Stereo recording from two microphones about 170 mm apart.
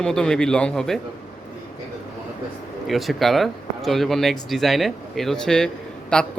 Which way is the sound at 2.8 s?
Centre (ahead or behind).